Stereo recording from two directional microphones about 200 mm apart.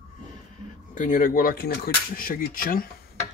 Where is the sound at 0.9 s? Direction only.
40° left (ahead or behind).